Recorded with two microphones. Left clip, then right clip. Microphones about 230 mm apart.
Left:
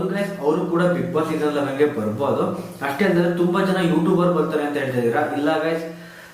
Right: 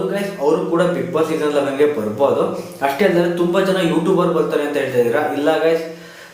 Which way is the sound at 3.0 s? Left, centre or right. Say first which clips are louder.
Right 3 dB; centre.